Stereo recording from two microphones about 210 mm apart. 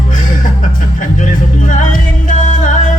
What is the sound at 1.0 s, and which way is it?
Music, 40° left (ahead or behind).